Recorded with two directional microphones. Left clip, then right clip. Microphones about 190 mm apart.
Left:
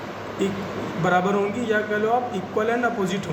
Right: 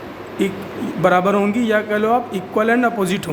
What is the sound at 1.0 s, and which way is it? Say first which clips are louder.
A man's voice: right 6 dB; 60° right (ahead or behind).